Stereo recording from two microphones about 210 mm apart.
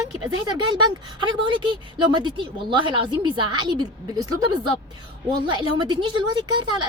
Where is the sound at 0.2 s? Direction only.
20° right (ahead or behind).